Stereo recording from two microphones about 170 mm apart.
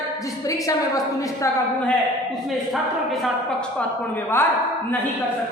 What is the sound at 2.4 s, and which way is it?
A woman's voice, centre (ahead or behind).